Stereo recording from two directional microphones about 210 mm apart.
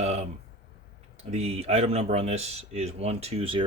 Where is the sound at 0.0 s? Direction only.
30° right (ahead or behind).